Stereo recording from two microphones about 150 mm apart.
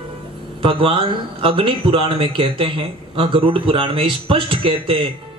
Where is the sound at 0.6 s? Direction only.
35° right (ahead or behind).